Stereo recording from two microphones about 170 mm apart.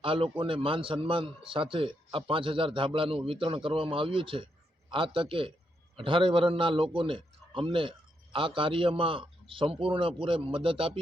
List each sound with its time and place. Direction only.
0.0 s speech: 30° right (ahead or behind)